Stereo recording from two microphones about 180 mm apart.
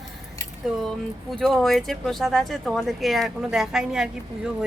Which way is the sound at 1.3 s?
Centre (ahead or behind).